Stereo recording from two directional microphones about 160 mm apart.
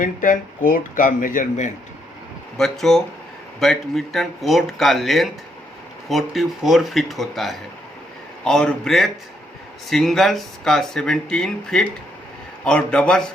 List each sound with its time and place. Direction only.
0.0 s speech: 55° left (ahead or behind)
2.6 s speech: centre (ahead or behind)